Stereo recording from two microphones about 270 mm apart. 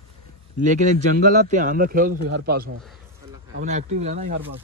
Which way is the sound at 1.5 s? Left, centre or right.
Right.